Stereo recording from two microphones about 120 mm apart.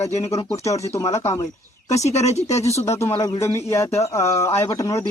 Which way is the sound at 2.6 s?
65° left (ahead or behind).